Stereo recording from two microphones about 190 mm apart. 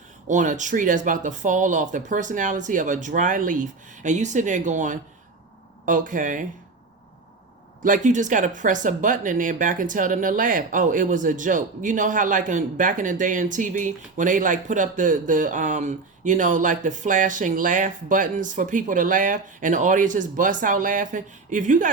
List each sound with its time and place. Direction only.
0.3 s speech: 40° right (ahead or behind)
7.9 s speech: 40° right (ahead or behind)